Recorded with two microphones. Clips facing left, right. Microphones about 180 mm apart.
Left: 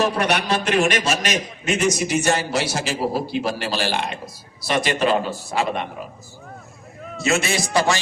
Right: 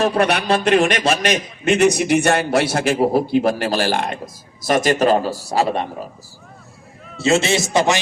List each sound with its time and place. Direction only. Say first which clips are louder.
0.0 s a man's voice: right 3 dB; 55° right (ahead or behind); by 6.1 s 35° right (ahead or behind)
7.2 s a man's voice: right 5 dB; 25° right (ahead or behind)